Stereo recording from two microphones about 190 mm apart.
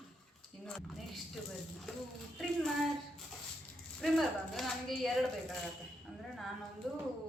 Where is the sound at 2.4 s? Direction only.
Centre (ahead or behind).